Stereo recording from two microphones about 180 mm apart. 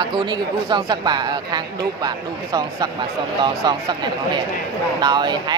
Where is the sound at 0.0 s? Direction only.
25° right (ahead or behind).